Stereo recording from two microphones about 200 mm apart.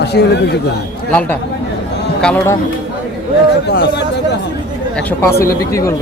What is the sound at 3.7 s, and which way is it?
Speech, 55° left (ahead or behind).